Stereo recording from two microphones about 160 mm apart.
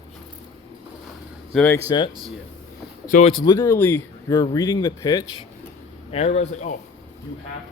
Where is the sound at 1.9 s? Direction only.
30° left (ahead or behind).